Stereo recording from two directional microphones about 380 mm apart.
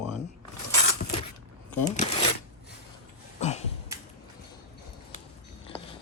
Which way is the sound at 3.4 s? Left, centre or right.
Centre.